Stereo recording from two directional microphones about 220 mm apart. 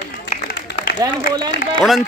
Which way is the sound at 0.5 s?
50° left (ahead or behind).